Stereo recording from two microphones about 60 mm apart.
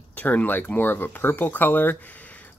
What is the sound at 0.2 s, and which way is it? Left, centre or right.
Speech, left.